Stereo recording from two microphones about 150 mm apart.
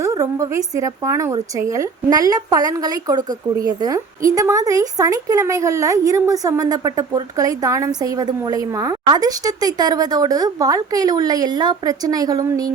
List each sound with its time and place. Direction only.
0.0 s a woman's voice: 25° right (ahead or behind)